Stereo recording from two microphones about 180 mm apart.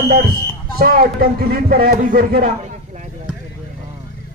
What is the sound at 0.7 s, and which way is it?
Speech, 55° right (ahead or behind).